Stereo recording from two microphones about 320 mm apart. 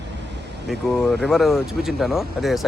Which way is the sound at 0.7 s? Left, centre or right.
Centre.